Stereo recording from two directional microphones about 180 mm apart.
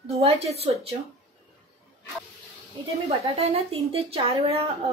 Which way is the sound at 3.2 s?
35° right (ahead or behind).